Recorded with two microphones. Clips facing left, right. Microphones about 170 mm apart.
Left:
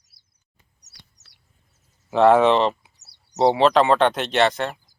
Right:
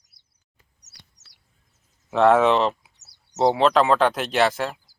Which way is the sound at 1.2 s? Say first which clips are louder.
Even; 65° left (ahead or behind).